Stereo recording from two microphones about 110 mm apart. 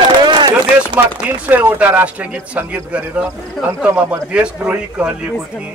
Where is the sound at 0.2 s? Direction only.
45° right (ahead or behind).